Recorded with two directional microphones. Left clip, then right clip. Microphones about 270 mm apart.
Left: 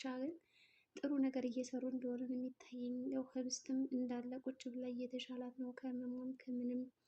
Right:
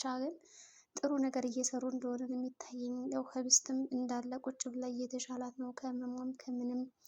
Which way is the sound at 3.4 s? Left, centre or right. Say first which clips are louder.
Right 13 dB; centre.